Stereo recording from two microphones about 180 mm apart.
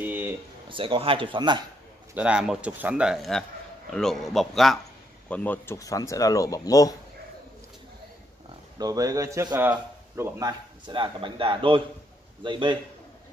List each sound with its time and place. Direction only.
0.0 s a sound: 10° right (ahead or behind)
0.7 s a man's voice: 30° right (ahead or behind)
2.1 s speech: 5° right (ahead or behind); by 7.0 s 20° left (ahead or behind)
8.7 s a man's voice: 20° right (ahead or behind)
10.9 s a man's voice: 25° right (ahead or behind)